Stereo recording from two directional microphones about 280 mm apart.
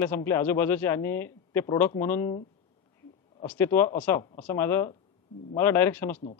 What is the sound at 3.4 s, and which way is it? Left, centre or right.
A man's voice, centre.